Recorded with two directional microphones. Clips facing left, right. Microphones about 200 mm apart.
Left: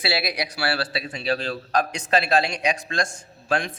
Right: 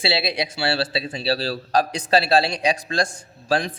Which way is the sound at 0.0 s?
25° right (ahead or behind).